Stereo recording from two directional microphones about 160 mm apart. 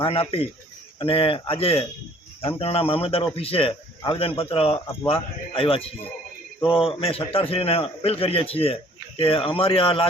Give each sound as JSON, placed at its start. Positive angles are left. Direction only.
{"t": 0.0, "sound": "a man's voice", "side_deg": 35}